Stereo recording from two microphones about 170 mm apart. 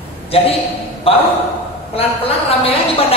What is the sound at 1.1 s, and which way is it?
A woman's voice, 35° left (ahead or behind).